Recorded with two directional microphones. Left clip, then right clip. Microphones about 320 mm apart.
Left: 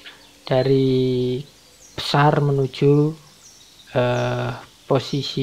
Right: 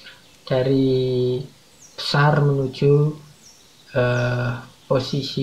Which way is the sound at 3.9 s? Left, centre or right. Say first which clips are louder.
Left 1 dB; left.